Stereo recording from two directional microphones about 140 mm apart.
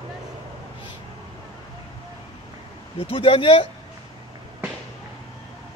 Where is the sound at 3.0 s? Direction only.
40° left (ahead or behind).